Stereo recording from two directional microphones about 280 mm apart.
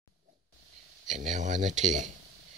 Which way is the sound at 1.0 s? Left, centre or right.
Right.